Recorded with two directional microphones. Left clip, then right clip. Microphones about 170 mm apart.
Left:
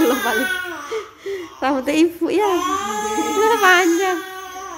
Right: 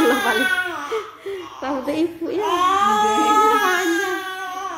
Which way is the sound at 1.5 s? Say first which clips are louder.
Left 6 dB; 40° left (ahead or behind).